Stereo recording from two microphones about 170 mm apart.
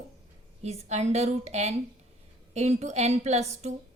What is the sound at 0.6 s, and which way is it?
A woman's voice, 40° right (ahead or behind).